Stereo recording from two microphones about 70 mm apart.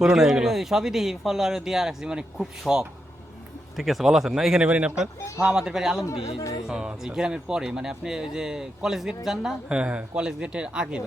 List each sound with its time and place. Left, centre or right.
0.0 s speech: centre